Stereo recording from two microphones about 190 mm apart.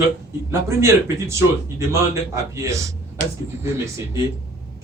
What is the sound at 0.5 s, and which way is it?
A man's voice, 15° right (ahead or behind).